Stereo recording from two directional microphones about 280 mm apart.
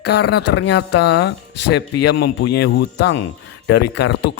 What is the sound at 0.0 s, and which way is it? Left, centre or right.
Speech, left.